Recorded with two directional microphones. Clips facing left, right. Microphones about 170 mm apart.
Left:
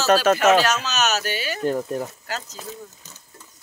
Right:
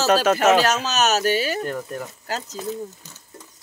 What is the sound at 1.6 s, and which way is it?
Speech, 30° left (ahead or behind).